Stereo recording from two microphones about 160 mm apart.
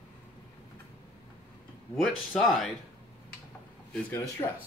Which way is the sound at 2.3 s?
Centre (ahead or behind).